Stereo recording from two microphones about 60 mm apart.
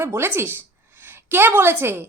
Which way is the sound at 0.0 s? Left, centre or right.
Right.